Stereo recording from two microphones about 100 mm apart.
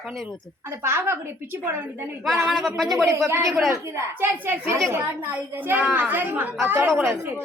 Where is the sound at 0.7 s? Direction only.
25° right (ahead or behind).